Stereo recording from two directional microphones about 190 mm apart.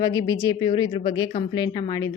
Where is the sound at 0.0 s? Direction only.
20° left (ahead or behind).